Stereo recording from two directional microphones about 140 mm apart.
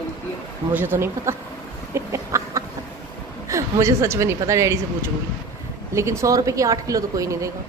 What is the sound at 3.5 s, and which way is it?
Speech, 20° right (ahead or behind).